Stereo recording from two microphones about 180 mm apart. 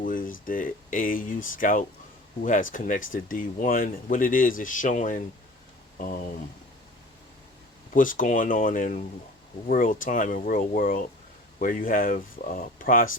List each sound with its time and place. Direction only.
0.0 s a sound: 50° left (ahead or behind)
0.4 s speech: 50° left (ahead or behind)
7.9 s speech: 50° left (ahead or behind)